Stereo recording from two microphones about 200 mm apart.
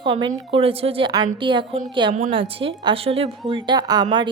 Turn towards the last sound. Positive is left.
turn(degrees=-20)  # may be behind; listen again after turning